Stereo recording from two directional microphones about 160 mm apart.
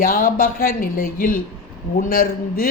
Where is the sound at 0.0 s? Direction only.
65° left (ahead or behind).